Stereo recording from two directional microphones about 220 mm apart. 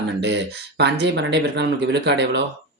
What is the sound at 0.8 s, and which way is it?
Speech, 50° right (ahead or behind).